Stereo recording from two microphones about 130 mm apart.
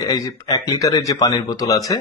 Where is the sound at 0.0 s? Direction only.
30° left (ahead or behind).